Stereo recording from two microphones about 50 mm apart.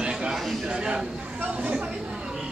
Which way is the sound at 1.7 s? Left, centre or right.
Centre.